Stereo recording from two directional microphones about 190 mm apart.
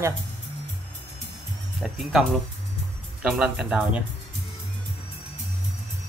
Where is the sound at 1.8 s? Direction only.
Centre (ahead or behind).